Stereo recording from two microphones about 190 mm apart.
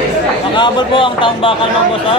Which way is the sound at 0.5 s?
25° left (ahead or behind).